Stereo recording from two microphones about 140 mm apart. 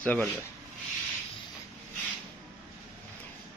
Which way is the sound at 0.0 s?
10° left (ahead or behind).